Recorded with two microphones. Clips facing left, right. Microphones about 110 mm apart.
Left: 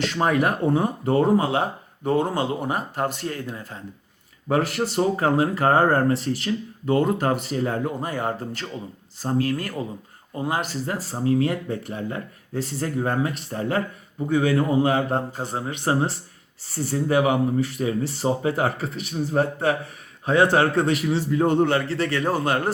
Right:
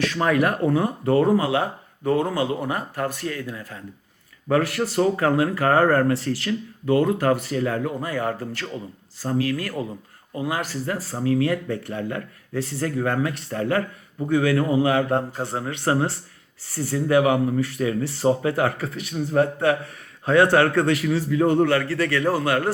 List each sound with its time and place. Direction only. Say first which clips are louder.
0.0 s speech: right 1 dB; 25° left (ahead or behind)